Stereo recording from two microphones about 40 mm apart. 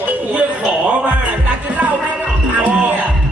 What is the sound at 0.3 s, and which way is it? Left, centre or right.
Music, right.